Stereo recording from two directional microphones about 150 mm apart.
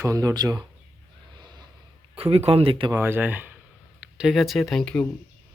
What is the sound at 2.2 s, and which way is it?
Speech, 40° right (ahead or behind).